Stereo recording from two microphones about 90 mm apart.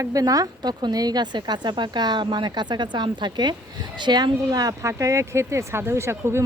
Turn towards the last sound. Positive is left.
turn(degrees=-30)  # may be behind; listen again after turning